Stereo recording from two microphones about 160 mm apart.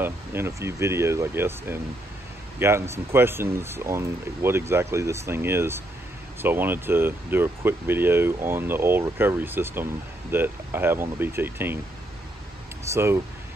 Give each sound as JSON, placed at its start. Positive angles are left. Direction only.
{"t": 0.0, "sound": "speech", "side_deg": -15}
{"t": 12.8, "sound": "speech", "side_deg": -15}